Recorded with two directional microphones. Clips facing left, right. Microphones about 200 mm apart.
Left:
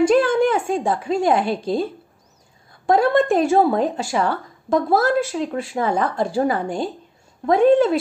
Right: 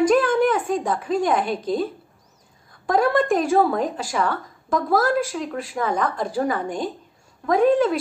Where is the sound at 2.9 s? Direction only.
25° left (ahead or behind).